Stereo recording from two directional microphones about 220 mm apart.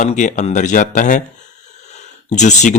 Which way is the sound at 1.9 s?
30° left (ahead or behind).